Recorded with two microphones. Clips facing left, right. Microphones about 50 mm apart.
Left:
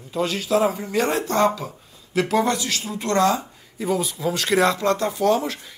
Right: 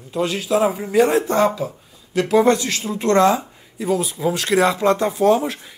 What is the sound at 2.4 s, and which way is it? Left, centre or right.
Speech, right.